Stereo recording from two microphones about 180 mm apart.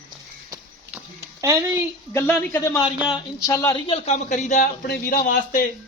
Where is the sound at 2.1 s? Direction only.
10° left (ahead or behind).